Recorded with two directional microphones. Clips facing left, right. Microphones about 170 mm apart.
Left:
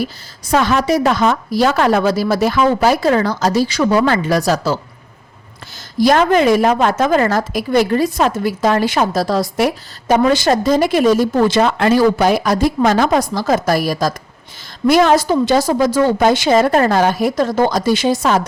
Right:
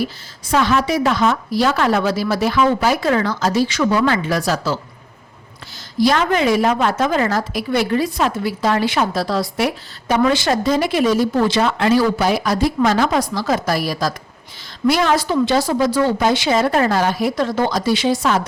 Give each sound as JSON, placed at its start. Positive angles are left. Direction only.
{"t": 0.4, "sound": "a woman's voice", "side_deg": 45}
{"t": 6.0, "sound": "a woman's voice", "side_deg": 45}